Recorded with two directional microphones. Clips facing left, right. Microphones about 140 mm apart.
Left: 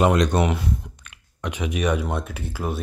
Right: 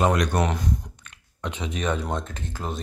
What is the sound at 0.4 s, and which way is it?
Speech, 5° left (ahead or behind).